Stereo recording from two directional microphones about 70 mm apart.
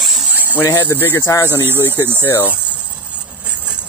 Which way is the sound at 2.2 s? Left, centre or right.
Left.